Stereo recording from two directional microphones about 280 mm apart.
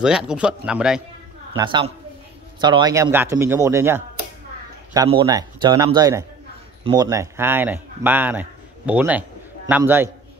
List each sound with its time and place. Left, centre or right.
0.0 s speech: centre
1.6 s speech: centre